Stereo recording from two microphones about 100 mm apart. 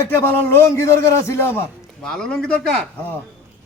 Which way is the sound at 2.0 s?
5° left (ahead or behind).